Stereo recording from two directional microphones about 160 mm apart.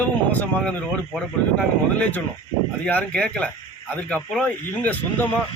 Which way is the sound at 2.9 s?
10° left (ahead or behind).